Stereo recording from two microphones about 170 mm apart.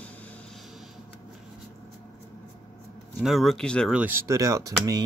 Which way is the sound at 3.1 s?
Centre (ahead or behind).